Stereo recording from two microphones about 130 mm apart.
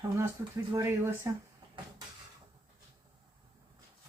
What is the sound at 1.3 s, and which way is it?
Speech, 20° right (ahead or behind).